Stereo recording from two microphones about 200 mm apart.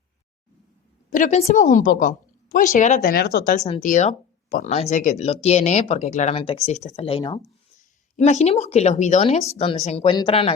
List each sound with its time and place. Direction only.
1.1 s speech: 35° left (ahead or behind)
3.7 s speech: 35° left (ahead or behind)
7.8 s speech: 35° left (ahead or behind)